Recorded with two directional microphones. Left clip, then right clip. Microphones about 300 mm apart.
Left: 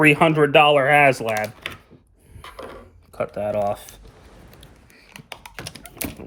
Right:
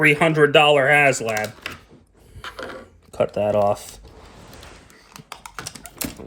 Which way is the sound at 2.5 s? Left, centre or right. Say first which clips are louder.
Right 4 dB; centre.